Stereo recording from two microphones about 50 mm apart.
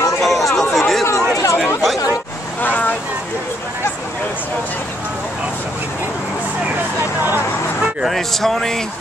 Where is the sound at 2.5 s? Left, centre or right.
Left.